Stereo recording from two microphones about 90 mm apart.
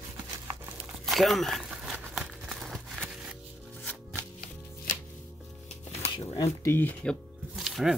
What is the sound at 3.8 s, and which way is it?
Music, 15° left (ahead or behind).